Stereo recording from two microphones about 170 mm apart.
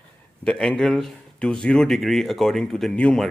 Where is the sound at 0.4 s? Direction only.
5° left (ahead or behind).